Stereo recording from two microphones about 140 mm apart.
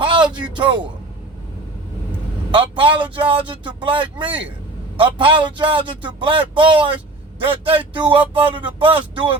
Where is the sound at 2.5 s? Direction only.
35° right (ahead or behind).